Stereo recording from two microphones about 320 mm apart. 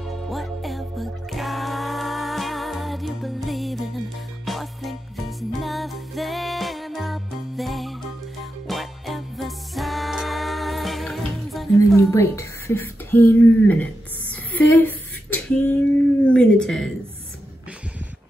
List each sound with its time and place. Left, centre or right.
0.0 s music: centre
14.5 s female singing: centre
16.3 s a sound: centre